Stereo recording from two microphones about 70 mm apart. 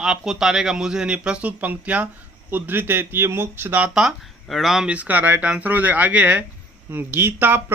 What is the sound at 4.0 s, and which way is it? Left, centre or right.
Speech, centre.